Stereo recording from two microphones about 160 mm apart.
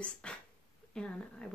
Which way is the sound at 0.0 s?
5° left (ahead or behind).